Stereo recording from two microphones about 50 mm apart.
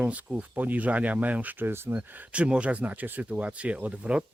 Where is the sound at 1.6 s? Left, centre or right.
Right.